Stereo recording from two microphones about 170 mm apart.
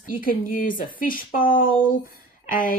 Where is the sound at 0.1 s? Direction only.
55° left (ahead or behind).